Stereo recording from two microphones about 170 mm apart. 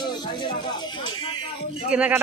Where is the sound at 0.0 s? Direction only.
25° left (ahead or behind).